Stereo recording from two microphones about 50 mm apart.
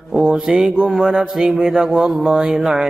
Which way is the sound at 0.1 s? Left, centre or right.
Right.